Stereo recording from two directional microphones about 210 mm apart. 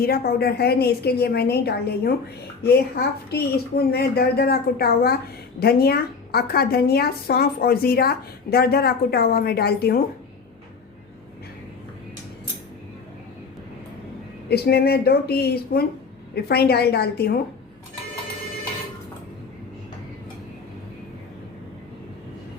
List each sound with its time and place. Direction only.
0.0 s a woman's voice: 45° left (ahead or behind)
14.5 s a woman's voice: 50° left (ahead or behind)